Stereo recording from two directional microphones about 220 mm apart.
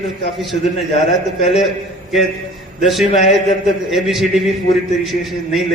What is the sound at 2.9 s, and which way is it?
A man's voice, centre (ahead or behind).